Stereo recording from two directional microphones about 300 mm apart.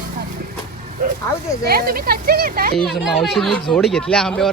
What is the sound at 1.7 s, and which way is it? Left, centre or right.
Speech, right.